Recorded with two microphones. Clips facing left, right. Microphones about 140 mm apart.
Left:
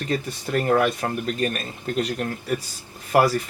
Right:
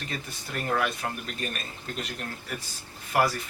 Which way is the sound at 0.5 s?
55° left (ahead or behind).